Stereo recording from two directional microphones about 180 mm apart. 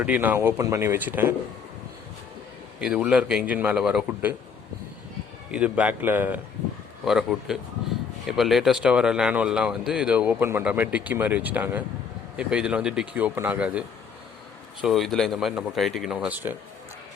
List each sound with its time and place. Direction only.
0.0 s a man's voice: 10° right (ahead or behind)
2.7 s a man's voice: 5° right (ahead or behind)
5.5 s a man's voice: 5° right (ahead or behind)